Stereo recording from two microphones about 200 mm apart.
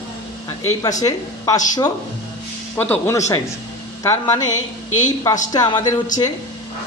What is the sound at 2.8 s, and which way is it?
Speech, 10° left (ahead or behind).